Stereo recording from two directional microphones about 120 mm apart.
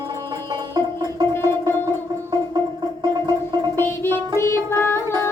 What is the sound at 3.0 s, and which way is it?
Gargling, 35° right (ahead or behind).